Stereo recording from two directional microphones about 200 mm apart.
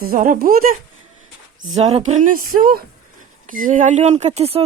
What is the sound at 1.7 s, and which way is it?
Speech, 35° right (ahead or behind).